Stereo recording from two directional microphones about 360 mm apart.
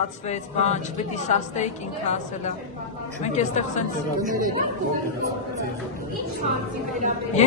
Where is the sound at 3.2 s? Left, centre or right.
Centre.